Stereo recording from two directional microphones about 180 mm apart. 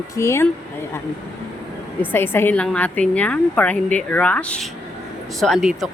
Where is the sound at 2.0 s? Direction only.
10° left (ahead or behind).